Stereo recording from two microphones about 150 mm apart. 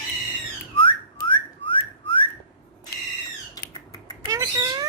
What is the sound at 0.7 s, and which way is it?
Whistling, 35° left (ahead or behind).